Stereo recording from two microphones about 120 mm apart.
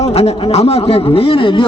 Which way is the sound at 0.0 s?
60° left (ahead or behind).